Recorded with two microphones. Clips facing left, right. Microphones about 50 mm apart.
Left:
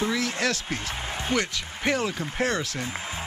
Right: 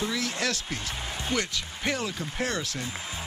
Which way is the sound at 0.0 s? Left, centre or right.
Left.